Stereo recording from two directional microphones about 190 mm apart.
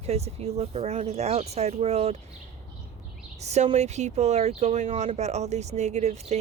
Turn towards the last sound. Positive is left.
turn(degrees=-35)  # may be behind; listen again after turning